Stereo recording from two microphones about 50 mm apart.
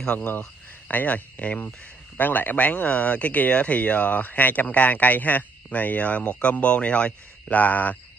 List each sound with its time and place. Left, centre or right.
0.2 s speech: left